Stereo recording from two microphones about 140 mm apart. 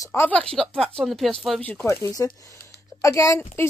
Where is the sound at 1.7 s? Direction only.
15° left (ahead or behind).